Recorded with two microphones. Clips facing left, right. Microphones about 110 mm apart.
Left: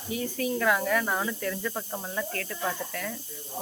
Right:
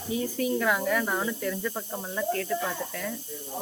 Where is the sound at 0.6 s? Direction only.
15° right (ahead or behind).